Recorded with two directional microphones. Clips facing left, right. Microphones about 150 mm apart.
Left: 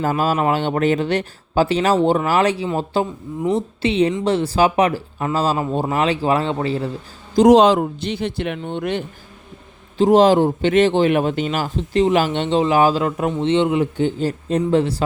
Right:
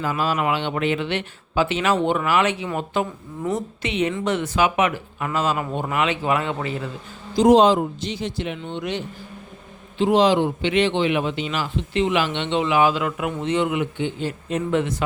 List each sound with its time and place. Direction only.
0.0 s a man's voice: 45° left (ahead or behind)
7.4 s a man's voice: 80° left; by 13.8 s 30° left (ahead or behind)
13.9 s a man's voice: 40° left (ahead or behind)